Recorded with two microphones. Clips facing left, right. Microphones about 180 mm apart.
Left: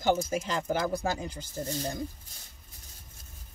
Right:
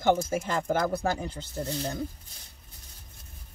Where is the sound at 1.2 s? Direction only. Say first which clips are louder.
Right 2 dB; 60° right (ahead or behind).